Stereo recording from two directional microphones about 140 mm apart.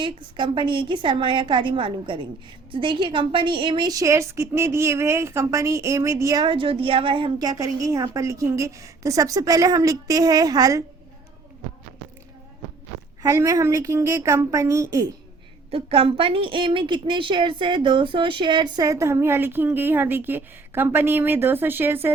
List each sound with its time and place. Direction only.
0.0 s a woman's voice: 35° right (ahead or behind)
6.4 s a woman's voice: 40° right (ahead or behind)
13.2 s a woman's voice: 25° right (ahead or behind)
15.7 s a woman's voice: 40° right (ahead or behind); by 22.1 s 15° right (ahead or behind)